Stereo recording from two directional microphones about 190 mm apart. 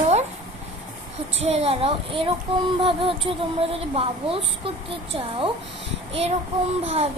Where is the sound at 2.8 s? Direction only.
25° right (ahead or behind).